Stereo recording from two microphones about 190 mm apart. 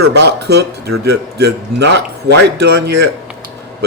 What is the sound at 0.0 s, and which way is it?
Speech, 60° right (ahead or behind).